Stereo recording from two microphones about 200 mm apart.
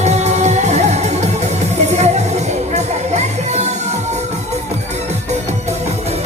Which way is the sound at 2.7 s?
35° right (ahead or behind).